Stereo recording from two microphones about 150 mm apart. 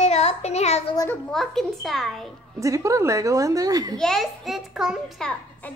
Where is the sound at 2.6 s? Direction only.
20° right (ahead or behind).